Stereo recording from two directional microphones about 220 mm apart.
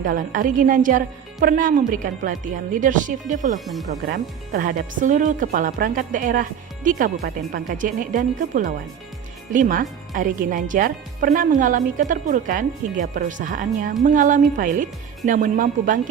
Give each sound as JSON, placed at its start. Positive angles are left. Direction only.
{"t": 0.0, "sound": "a woman's voice", "side_deg": -35}
{"t": 3.6, "sound": "speech", "side_deg": 0}
{"t": 4.0, "sound": "a woman's voice", "side_deg": -40}